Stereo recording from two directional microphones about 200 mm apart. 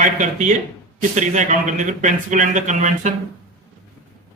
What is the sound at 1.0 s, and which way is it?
Speech, 35° right (ahead or behind).